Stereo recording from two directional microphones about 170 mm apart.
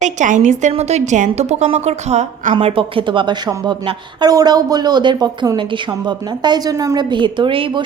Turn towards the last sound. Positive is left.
turn(degrees=-30)  # may be behind; listen again after turning